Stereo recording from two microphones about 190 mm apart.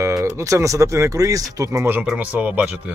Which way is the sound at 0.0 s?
15° right (ahead or behind).